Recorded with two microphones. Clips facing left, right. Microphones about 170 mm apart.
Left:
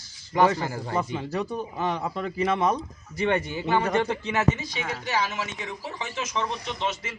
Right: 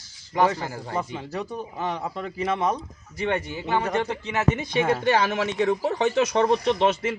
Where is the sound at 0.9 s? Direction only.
5° right (ahead or behind).